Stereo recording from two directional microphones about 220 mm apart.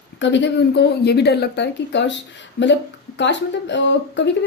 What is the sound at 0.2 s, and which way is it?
Speech, 55° left (ahead or behind).